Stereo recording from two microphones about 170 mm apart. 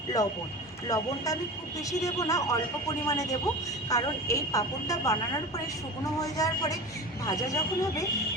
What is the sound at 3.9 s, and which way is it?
A woman's voice, 20° left (ahead or behind).